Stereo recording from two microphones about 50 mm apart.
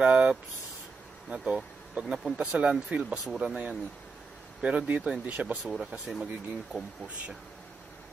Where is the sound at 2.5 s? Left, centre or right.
Right.